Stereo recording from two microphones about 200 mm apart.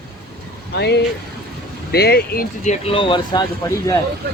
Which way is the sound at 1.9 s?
55° left (ahead or behind).